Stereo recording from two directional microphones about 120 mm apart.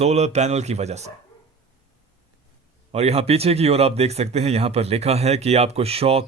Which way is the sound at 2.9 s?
60° right (ahead or behind).